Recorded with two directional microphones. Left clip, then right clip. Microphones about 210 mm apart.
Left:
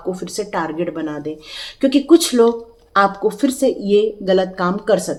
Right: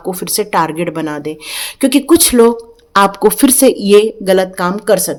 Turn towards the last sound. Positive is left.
turn(degrees=-30)  # may be behind; listen again after turning